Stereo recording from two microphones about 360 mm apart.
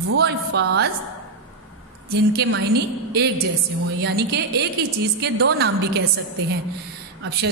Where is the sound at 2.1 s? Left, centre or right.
Right.